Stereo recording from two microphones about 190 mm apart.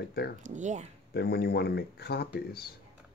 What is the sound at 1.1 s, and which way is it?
Speech, 55° left (ahead or behind).